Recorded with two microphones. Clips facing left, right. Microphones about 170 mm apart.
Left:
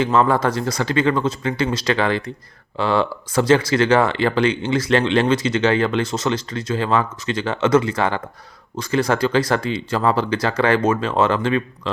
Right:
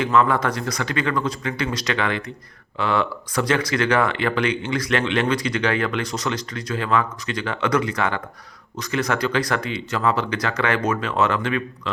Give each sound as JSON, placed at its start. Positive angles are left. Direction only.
{"t": 0.0, "sound": "speech", "side_deg": 30}